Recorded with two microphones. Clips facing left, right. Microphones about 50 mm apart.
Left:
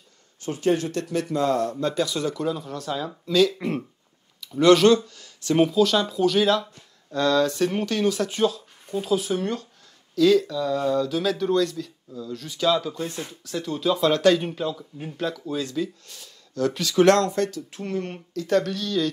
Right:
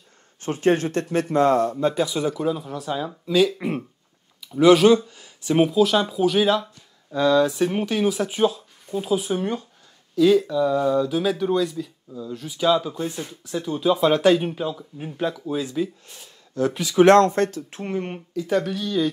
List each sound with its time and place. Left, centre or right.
0.4 s speech: right
1.7 s speech: centre
17.2 s speech: right
17.8 s speech: right